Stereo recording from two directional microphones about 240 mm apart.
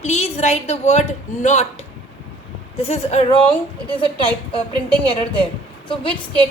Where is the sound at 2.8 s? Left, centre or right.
Left.